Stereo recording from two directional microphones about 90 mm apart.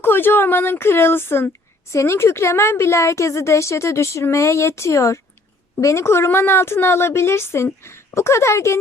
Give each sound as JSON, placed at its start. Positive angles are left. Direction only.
{"t": 0.0, "sound": "a woman's voice", "side_deg": 25}